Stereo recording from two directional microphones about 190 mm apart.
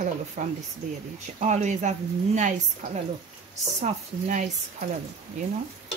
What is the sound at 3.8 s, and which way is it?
Speech, 40° right (ahead or behind).